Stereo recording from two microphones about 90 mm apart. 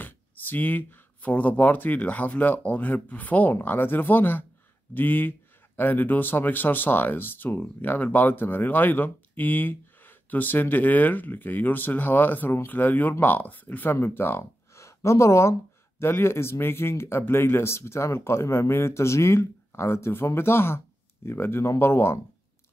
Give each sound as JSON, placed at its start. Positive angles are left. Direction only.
{"t": 0.0, "sound": "speech", "side_deg": 20}